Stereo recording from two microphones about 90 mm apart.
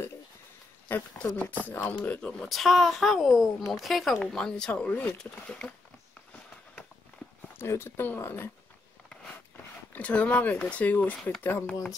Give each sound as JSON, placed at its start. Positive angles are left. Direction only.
{"t": 1.1, "sound": "speech", "side_deg": 20}
{"t": 7.5, "sound": "speech", "side_deg": 30}
{"t": 9.9, "sound": "speech", "side_deg": 15}